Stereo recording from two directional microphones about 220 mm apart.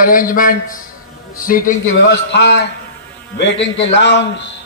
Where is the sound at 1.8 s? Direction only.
55° left (ahead or behind).